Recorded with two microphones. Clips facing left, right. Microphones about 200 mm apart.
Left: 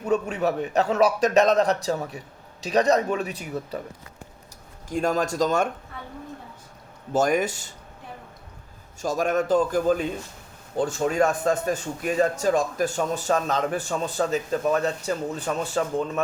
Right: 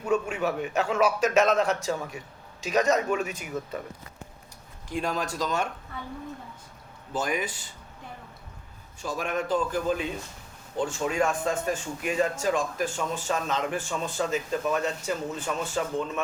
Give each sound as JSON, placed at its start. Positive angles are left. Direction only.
{"t": 0.0, "sound": "a man's voice", "side_deg": 35}
{"t": 4.9, "sound": "a man's voice", "side_deg": 45}
{"t": 7.1, "sound": "a man's voice", "side_deg": 45}
{"t": 9.0, "sound": "a man's voice", "side_deg": 45}